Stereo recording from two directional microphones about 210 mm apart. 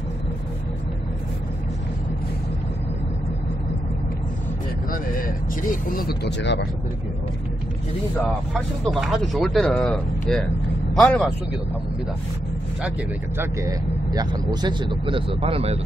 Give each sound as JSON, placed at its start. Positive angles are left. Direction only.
{"t": 4.9, "sound": "speech", "side_deg": 40}
{"t": 8.3, "sound": "speech", "side_deg": 0}
{"t": 13.4, "sound": "speech", "side_deg": -15}